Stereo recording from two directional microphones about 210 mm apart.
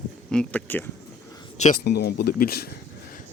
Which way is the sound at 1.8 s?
50° left (ahead or behind).